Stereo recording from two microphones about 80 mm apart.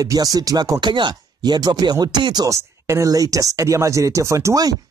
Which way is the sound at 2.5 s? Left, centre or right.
Right.